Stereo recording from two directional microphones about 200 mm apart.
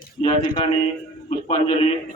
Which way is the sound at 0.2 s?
25° left (ahead or behind).